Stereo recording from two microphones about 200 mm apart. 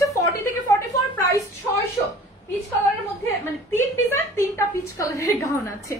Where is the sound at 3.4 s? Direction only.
10° left (ahead or behind).